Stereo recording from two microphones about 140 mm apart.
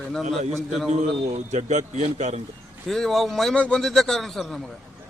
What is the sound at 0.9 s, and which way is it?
A man's voice, 55° right (ahead or behind).